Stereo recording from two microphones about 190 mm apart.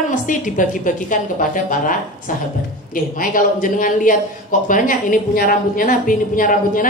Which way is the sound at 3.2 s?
45° left (ahead or behind).